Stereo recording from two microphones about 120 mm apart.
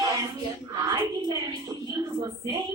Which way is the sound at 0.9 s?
35° right (ahead or behind).